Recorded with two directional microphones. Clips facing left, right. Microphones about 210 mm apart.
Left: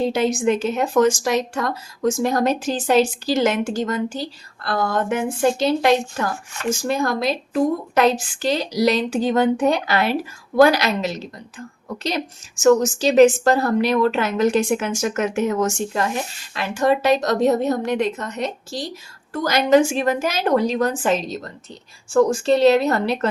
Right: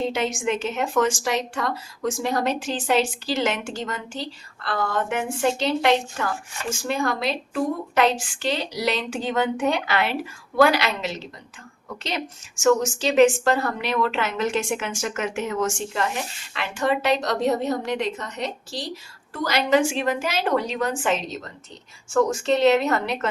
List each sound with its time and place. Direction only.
0.0 s a woman's voice: 35° left (ahead or behind)